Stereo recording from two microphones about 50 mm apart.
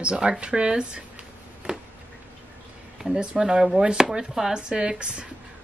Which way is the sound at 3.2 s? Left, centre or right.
Centre.